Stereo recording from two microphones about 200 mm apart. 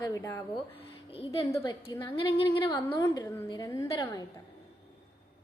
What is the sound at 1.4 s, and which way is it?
A woman's voice, 15° left (ahead or behind).